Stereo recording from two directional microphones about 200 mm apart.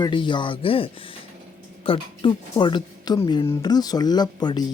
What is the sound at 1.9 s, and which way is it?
Speech, 25° left (ahead or behind).